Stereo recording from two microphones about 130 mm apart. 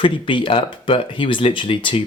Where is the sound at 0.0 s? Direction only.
40° left (ahead or behind).